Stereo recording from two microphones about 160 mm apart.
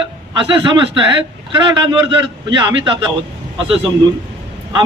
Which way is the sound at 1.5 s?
25° right (ahead or behind).